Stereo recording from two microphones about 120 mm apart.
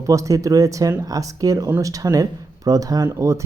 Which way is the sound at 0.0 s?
25° right (ahead or behind).